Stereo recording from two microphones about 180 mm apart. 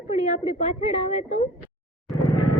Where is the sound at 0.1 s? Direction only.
35° left (ahead or behind).